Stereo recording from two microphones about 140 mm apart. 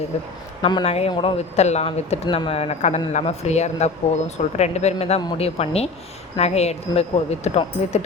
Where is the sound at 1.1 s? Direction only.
35° left (ahead or behind).